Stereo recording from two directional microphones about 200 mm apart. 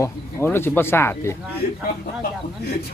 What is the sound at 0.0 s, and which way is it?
Speech, 10° left (ahead or behind).